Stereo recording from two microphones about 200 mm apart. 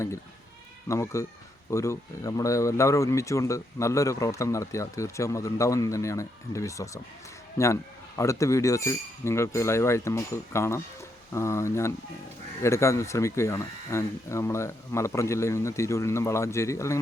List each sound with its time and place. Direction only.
0.9 s speech: 15° left (ahead or behind)